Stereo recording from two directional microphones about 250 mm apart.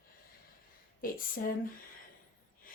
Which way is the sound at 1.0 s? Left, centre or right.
Left.